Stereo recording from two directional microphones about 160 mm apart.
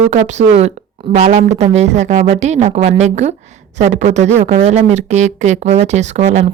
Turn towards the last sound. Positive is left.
turn(degrees=-45)  # may be behind; listen again after turning